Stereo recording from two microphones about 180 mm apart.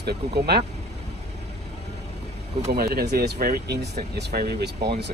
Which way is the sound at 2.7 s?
60° right (ahead or behind).